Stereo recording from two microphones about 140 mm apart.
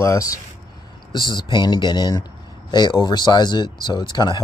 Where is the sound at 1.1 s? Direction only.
30° left (ahead or behind).